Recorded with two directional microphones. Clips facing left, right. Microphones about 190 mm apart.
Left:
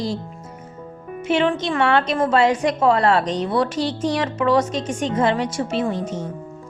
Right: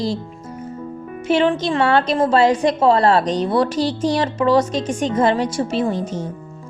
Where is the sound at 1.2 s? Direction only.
35° right (ahead or behind).